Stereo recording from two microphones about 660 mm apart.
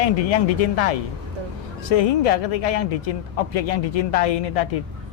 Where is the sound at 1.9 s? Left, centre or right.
Left.